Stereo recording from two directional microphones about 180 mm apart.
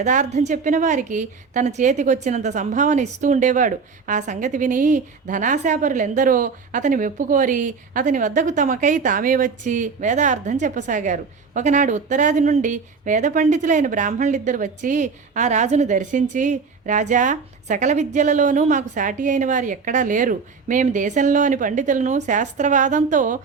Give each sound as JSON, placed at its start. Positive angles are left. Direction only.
{"t": 0.0, "sound": "a woman's voice", "side_deg": -40}